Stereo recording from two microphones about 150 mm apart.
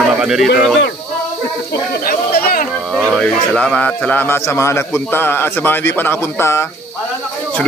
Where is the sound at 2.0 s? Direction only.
80° left.